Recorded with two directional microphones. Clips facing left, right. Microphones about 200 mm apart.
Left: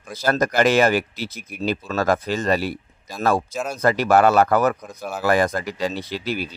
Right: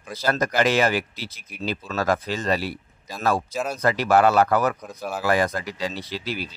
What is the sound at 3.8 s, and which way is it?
Speech, 45° left (ahead or behind).